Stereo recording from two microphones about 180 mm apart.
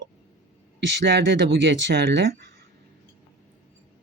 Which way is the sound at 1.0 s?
70° right (ahead or behind).